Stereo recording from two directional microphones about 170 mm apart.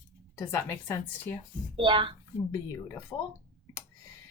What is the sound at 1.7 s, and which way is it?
Speech, 30° right (ahead or behind).